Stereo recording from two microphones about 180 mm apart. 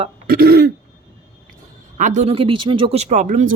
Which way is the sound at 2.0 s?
40° right (ahead or behind).